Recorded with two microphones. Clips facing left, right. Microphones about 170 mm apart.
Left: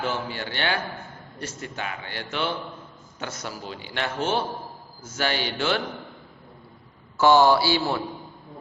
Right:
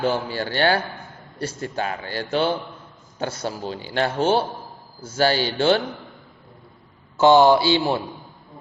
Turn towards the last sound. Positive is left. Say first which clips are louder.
# right 4 dB
turn(degrees=-20)  # may be behind; listen again after turning